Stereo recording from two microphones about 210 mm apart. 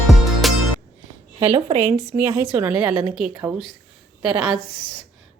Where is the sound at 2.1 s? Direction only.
10° right (ahead or behind).